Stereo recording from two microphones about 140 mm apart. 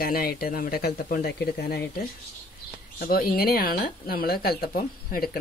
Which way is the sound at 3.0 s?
90° left.